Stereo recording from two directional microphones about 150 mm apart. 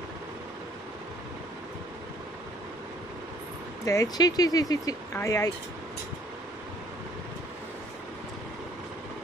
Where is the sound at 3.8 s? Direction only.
20° left (ahead or behind).